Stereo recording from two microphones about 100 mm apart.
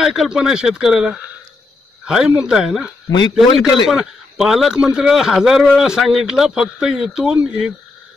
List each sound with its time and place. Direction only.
0.0 s speech: 5° right (ahead or behind)
3.1 s a man's voice: 45° left (ahead or behind)
3.9 s a man's voice: 5° right (ahead or behind)